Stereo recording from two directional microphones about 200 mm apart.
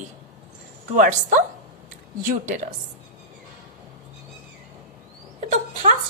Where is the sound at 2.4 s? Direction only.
40° right (ahead or behind).